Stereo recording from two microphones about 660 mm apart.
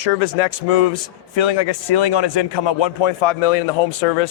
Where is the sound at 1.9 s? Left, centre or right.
Left.